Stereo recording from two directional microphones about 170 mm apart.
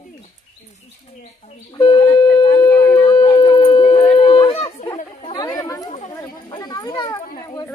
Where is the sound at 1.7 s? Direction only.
35° left (ahead or behind).